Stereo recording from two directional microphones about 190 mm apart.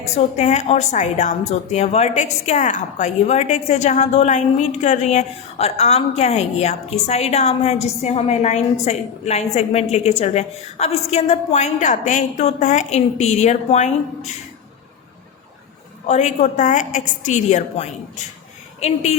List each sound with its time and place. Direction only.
0.0 s a woman's voice: 35° left (ahead or behind)
16.0 s a woman's voice: 40° left (ahead or behind)